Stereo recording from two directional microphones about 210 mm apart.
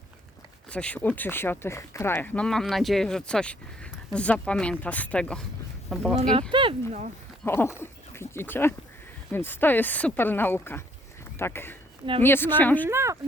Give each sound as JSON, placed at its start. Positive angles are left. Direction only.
{"t": 0.7, "sound": "speech", "side_deg": 5}
{"t": 6.5, "sound": "speech", "side_deg": -25}
{"t": 7.4, "sound": "speech", "side_deg": 10}
{"t": 12.9, "sound": "speech", "side_deg": -15}